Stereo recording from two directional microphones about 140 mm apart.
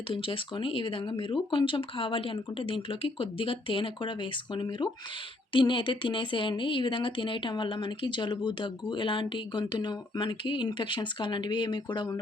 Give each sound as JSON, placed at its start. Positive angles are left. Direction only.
{"t": 0.1, "sound": "speech", "side_deg": 40}